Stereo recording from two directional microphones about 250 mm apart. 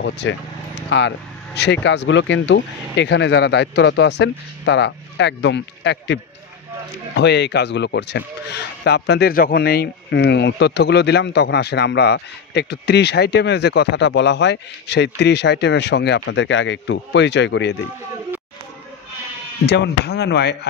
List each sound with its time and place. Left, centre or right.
0.0 s speech: left
7.2 s speech: left
19.6 s speech: left